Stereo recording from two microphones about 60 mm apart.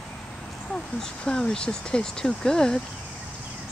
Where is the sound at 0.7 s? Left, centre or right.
Centre.